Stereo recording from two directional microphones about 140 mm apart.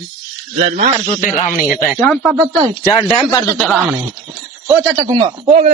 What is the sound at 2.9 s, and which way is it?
Speech, 30° left (ahead or behind).